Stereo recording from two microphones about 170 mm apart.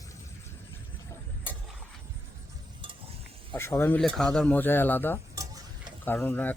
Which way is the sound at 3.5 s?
15° left (ahead or behind).